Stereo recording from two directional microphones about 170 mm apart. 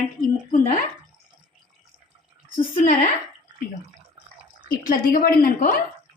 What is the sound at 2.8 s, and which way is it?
Speech, 50° left (ahead or behind).